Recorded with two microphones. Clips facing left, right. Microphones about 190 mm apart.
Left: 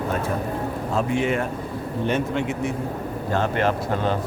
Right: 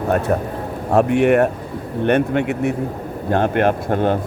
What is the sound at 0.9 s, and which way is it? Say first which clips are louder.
A man's voice: right 9 dB; 70° right (ahead or behind).